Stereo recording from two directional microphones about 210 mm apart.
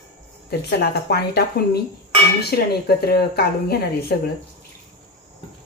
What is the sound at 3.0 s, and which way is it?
A woman's voice, 50° left (ahead or behind).